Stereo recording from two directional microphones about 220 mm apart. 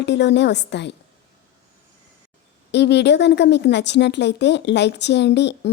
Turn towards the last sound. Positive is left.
turn(degrees=50)  # may be behind; listen again after turning